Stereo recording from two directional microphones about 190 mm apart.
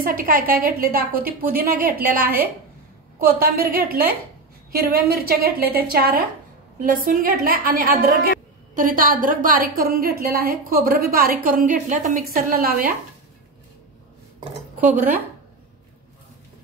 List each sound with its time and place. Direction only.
0.0 s a woman's voice: 50° right (ahead or behind)
3.3 s a woman's voice: 55° right (ahead or behind)
14.9 s speech: 10° right (ahead or behind)